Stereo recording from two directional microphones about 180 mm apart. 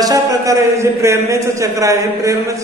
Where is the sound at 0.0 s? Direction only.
20° right (ahead or behind).